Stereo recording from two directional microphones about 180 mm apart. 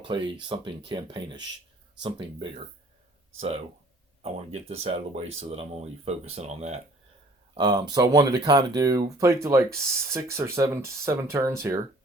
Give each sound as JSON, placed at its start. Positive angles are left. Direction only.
{"t": 0.0, "sound": "speech", "side_deg": -30}
{"t": 4.2, "sound": "speech", "side_deg": -35}
{"t": 7.5, "sound": "speech", "side_deg": -25}